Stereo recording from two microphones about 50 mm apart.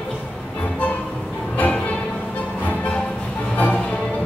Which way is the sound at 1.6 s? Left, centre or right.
Left.